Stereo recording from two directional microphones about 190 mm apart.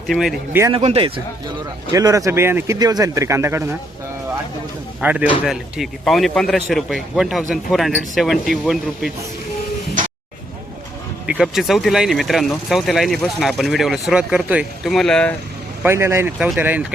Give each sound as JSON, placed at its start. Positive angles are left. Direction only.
{"t": 0.1, "sound": "speech", "side_deg": 0}
{"t": 0.7, "sound": "speech", "side_deg": -30}
{"t": 1.9, "sound": "speech", "side_deg": -15}
{"t": 4.9, "sound": "a man's voice", "side_deg": -5}
{"t": 11.3, "sound": "speech", "side_deg": -5}
{"t": 15.8, "sound": "speech", "side_deg": -15}